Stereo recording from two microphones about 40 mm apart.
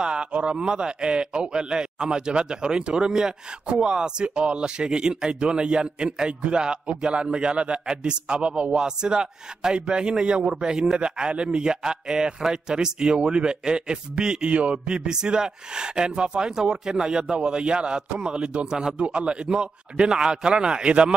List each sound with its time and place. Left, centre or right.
0.0 s a man's voice: right